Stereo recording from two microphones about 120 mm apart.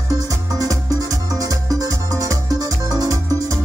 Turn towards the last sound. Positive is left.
turn(degrees=-30)  # may be behind; listen again after turning